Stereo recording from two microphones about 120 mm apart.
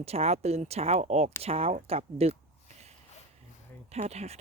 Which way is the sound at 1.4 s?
55° right (ahead or behind).